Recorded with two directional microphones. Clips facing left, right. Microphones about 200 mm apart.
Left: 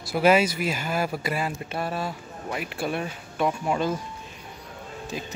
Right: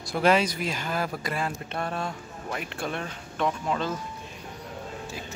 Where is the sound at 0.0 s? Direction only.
5° left (ahead or behind).